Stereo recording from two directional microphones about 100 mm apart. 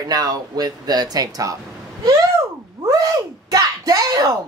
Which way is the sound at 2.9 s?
35° right (ahead or behind).